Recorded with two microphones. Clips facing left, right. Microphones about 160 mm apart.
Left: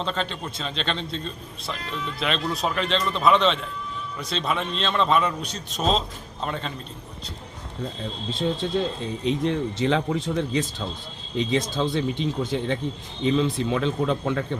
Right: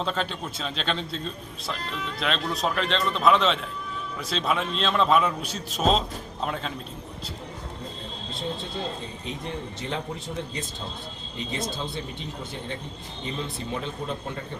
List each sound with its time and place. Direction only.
0.0 s a man's voice: 5° right (ahead or behind)
8.6 s speech: 90° left